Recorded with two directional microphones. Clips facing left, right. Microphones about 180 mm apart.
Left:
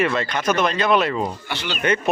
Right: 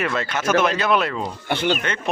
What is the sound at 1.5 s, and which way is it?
Speech, 50° right (ahead or behind).